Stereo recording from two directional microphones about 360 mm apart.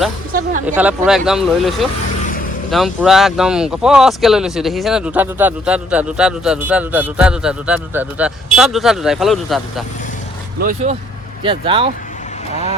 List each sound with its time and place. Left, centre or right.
0.6 s speech: centre
10.6 s speech: right